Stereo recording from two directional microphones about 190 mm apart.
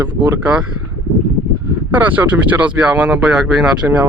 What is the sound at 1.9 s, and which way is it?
Speech, 10° right (ahead or behind).